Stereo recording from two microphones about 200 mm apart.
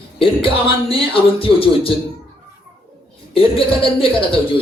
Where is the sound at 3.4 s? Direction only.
25° left (ahead or behind).